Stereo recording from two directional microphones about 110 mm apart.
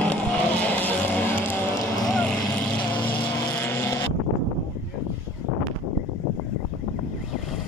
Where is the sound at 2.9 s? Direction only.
15° left (ahead or behind).